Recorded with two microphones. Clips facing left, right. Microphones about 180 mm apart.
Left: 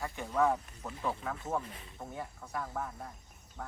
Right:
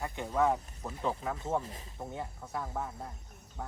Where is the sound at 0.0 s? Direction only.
15° right (ahead or behind).